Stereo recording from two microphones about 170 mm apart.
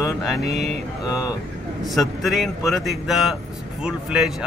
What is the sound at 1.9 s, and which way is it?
Speech, centre (ahead or behind).